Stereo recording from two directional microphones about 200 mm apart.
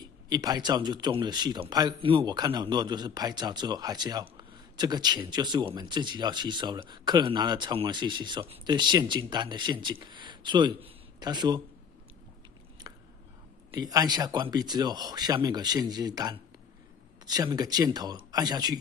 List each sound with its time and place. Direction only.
0.0 s speech: 20° right (ahead or behind)
13.7 s speech: 20° right (ahead or behind)